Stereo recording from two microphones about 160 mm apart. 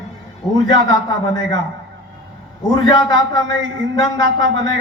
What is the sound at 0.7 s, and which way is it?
Speech, 25° left (ahead or behind).